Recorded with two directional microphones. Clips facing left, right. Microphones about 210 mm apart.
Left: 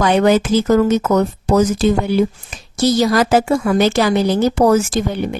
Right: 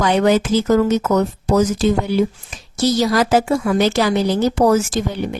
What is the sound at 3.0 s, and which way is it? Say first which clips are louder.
A woman's voice: left 2 dB; 50° left (ahead or behind).